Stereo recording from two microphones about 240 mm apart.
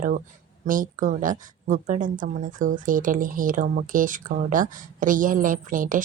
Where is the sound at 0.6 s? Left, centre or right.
Right.